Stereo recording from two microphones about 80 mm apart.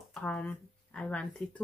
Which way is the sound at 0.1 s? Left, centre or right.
Centre.